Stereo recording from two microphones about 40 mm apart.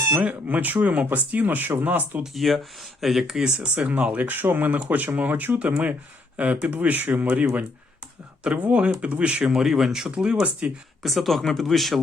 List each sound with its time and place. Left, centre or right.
0.2 s speech: right
1.5 s speech: right
2.2 s speech: centre
3.8 s speech: right
4.3 s speech: right
8.5 s speech: right
9.0 s speech: right
9.5 s speech: centre
10.6 s speech: right
11.0 s speech: centre